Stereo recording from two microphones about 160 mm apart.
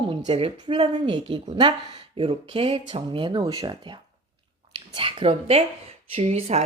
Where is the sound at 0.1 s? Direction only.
30° right (ahead or behind).